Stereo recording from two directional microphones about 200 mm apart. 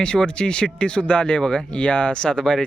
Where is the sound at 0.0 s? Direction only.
5° left (ahead or behind).